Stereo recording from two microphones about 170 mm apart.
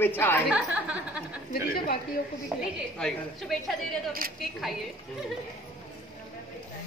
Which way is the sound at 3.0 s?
Centre (ahead or behind).